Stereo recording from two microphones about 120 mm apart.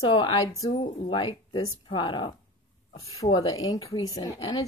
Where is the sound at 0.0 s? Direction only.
35° left (ahead or behind).